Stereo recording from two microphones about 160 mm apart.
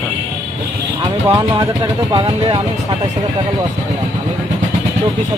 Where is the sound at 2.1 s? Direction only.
30° right (ahead or behind).